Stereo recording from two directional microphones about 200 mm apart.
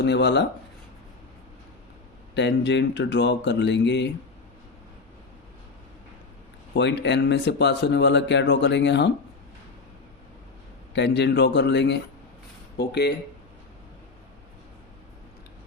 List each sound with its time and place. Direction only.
0.0 s speech: 60° left (ahead or behind)
2.3 s speech: 60° left (ahead or behind)
6.7 s speech: 60° left (ahead or behind)
10.9 s speech: 60° left (ahead or behind)